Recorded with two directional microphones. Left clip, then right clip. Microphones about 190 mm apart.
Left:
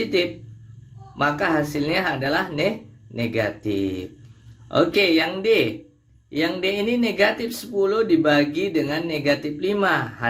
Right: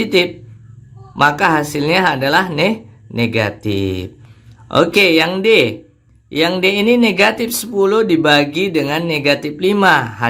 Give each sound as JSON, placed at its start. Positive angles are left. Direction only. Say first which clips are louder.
{"t": 0.0, "sound": "speech", "louder": "right 7 dB", "side_deg": -30}